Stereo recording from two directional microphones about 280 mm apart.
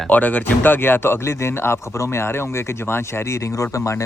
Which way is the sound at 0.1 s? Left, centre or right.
Centre.